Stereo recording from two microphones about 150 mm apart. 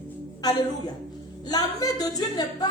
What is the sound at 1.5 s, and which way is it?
A woman's voice, 25° left (ahead or behind).